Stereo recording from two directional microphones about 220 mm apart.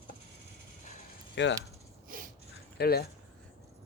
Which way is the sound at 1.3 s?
55° left (ahead or behind).